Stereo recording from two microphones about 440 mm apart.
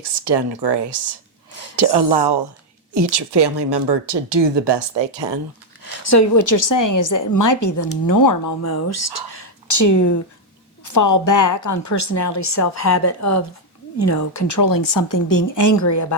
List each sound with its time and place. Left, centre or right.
0.0 s a woman's voice: right
5.8 s a woman's voice: left